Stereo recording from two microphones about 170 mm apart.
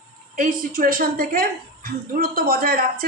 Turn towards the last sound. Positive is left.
turn(degrees=-60)  # may be behind; listen again after turning